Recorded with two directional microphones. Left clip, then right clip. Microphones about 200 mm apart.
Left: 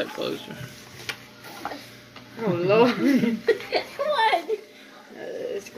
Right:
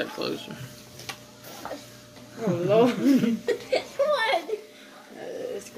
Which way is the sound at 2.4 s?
20° left (ahead or behind).